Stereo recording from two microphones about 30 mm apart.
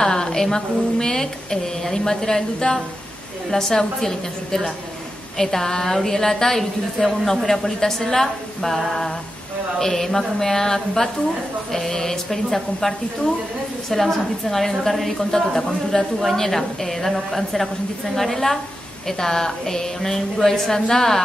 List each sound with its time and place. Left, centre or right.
0.0 s a woman's voice: left